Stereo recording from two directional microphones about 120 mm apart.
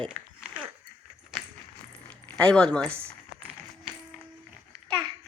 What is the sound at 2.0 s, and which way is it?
Speech, 10° left (ahead or behind).